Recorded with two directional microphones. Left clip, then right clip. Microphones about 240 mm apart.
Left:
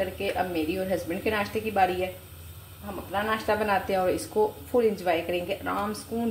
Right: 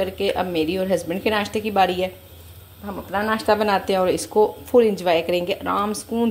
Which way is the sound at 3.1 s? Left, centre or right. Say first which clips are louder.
Right 6 dB; right.